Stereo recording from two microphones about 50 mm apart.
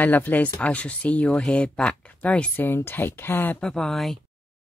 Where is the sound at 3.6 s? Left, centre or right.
Centre.